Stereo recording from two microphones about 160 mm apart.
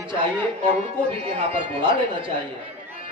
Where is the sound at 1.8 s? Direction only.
30° right (ahead or behind).